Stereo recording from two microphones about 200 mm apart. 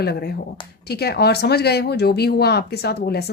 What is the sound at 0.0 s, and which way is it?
A woman's voice, 55° left (ahead or behind).